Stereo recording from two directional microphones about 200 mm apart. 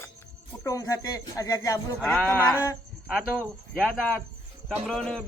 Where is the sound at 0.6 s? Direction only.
15° left (ahead or behind).